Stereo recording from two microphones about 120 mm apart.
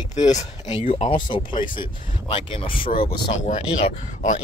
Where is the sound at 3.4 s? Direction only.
75° left (ahead or behind).